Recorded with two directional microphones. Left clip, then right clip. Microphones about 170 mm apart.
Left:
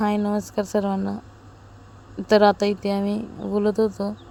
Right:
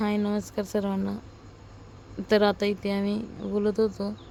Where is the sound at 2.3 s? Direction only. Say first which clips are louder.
Left 6 dB; 20° left (ahead or behind).